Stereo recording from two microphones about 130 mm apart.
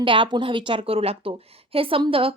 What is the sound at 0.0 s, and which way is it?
A woman's voice, 40° right (ahead or behind).